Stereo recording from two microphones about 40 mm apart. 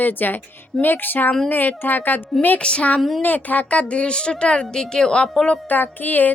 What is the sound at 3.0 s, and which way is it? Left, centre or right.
Speech, centre.